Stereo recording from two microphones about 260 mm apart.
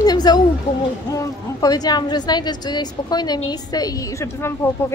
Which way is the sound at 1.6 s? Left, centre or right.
Centre.